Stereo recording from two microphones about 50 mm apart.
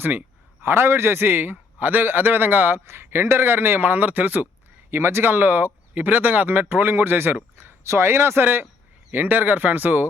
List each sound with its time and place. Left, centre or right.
0.0 s speech: right
0.6 s speech: right
2.8 s speech: right
4.9 s speech: right
7.9 s speech: right
9.1 s speech: right